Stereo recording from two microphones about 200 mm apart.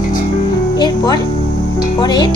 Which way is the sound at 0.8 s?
20° left (ahead or behind).